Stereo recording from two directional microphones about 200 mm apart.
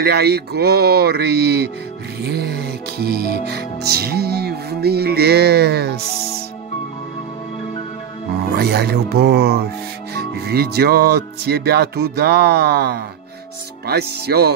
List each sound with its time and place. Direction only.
0.0 s speech: 50° right (ahead or behind)
2.2 s music: 55° right (ahead or behind)
3.4 s speech: 55° right (ahead or behind)
8.5 s speech: 55° right (ahead or behind)